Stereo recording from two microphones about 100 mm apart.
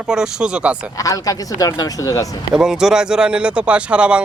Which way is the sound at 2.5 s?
5° right (ahead or behind).